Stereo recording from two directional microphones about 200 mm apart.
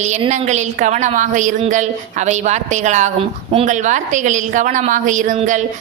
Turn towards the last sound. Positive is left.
turn(degrees=-40)  # may be behind; listen again after turning